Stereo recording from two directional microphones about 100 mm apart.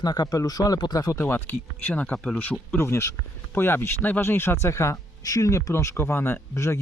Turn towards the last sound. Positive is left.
turn(degrees=25)  # may be behind; listen again after turning